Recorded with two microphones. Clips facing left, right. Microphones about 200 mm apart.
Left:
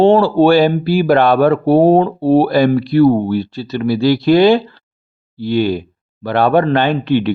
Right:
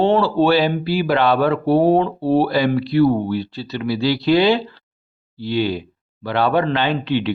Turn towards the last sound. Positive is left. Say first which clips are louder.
# left 5 dB
turn(degrees=50)  # may be behind; listen again after turning